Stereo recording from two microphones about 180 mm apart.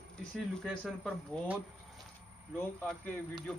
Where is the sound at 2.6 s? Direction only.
5° left (ahead or behind).